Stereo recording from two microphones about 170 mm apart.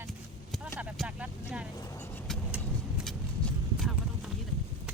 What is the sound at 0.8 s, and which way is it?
Vehicle, 5° right (ahead or behind).